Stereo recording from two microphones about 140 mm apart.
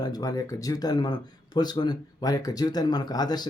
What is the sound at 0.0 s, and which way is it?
Speech, 25° left (ahead or behind).